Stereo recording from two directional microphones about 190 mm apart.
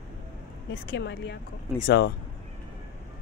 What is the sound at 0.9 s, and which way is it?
Speech, 65° left (ahead or behind).